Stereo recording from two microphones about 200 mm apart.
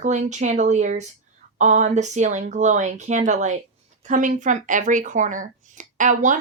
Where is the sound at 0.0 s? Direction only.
35° right (ahead or behind).